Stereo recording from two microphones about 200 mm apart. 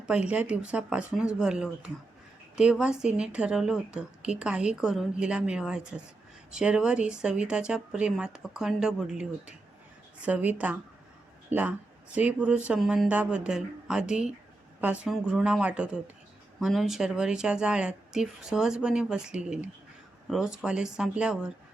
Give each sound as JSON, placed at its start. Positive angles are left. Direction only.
{"t": 0.0, "sound": "a woman's voice", "side_deg": -5}